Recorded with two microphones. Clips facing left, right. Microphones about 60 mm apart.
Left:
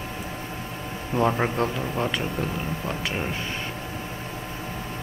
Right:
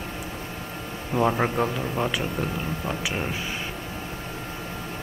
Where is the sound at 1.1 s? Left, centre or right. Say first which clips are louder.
Even; centre.